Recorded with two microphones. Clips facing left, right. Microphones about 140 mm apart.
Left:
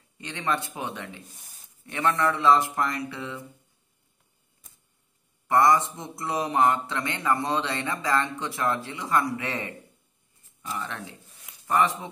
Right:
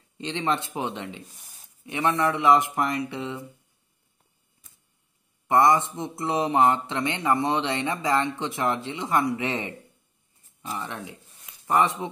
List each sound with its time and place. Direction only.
0.2 s speech: 25° right (ahead or behind)
5.5 s speech: 20° right (ahead or behind)